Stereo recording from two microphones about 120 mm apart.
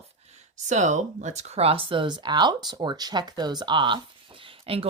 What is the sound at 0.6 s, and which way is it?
Speech, 90° right.